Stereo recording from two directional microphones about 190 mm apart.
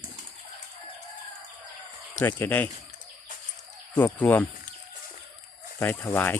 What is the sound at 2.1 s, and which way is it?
Speech, 10° left (ahead or behind).